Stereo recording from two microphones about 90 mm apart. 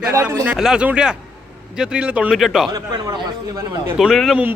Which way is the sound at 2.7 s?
45° right (ahead or behind).